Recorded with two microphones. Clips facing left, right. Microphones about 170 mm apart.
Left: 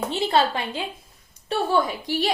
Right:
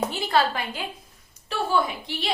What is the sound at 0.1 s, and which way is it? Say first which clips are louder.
Speech: left 2 dB; 25° left (ahead or behind).